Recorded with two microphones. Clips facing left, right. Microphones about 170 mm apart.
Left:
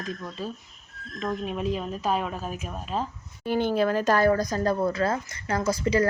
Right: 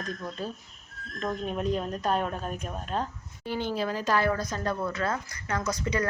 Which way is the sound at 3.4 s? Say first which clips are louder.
Left 6 dB; 55° left (ahead or behind).